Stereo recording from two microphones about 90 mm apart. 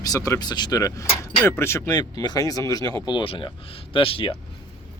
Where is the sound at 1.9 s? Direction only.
50° left (ahead or behind).